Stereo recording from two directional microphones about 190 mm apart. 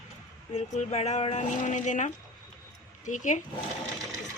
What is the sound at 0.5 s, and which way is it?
Speech, 35° left (ahead or behind).